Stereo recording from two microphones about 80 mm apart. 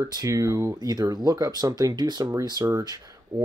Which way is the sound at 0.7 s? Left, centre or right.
Right.